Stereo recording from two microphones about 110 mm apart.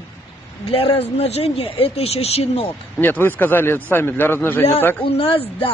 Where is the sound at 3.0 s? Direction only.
20° left (ahead or behind).